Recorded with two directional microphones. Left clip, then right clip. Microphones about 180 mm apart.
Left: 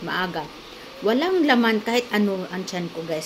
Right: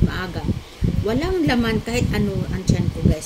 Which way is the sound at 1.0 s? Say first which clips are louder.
Left 2 dB; 20° right (ahead or behind).